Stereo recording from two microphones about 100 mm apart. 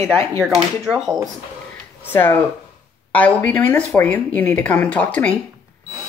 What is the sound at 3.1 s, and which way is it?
Speech, 15° left (ahead or behind).